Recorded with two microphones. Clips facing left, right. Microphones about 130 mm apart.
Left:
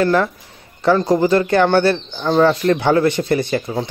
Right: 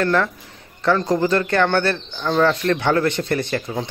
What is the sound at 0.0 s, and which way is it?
A woman's voice, 10° left (ahead or behind).